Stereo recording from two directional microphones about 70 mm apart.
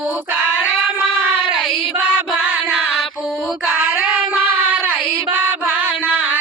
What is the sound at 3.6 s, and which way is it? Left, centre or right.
Child singing, right.